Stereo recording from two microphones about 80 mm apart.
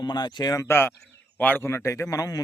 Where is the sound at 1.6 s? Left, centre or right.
Left.